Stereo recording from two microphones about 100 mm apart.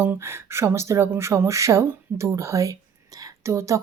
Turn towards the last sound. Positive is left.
turn(degrees=-30)  # may be behind; listen again after turning